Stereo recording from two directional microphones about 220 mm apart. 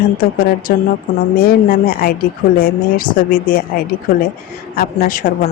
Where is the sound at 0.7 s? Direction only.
45° left (ahead or behind).